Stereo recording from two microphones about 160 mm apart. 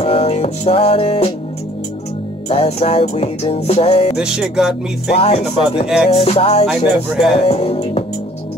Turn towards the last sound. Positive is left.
turn(degrees=40)  # may be behind; listen again after turning